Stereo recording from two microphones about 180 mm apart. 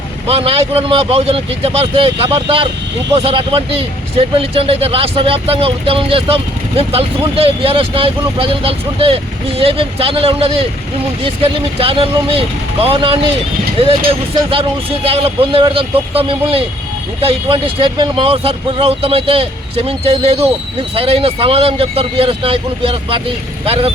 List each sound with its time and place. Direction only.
0.3 s speech: 30° right (ahead or behind)